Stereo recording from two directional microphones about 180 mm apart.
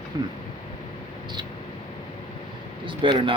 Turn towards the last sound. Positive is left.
turn(degrees=-30)  # may be behind; listen again after turning